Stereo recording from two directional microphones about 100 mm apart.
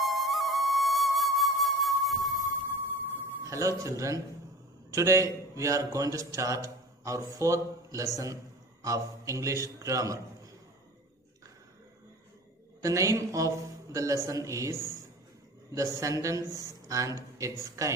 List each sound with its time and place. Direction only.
0.0 s music: centre (ahead or behind)
3.4 s a man's voice: 30° right (ahead or behind)
12.8 s a man's voice: 30° right (ahead or behind)